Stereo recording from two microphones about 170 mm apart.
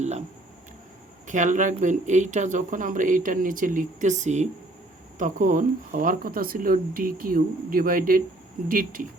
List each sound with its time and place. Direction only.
1.3 s speech: 50° right (ahead or behind)